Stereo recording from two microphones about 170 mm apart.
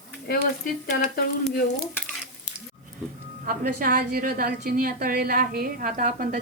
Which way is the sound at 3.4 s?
55° right (ahead or behind).